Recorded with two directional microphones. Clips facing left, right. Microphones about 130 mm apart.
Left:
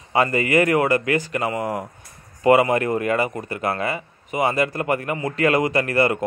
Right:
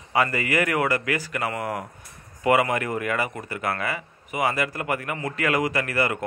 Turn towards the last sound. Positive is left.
turn(degrees=25)  # may be behind; listen again after turning